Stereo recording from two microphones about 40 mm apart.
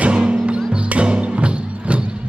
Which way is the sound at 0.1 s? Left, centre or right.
Right.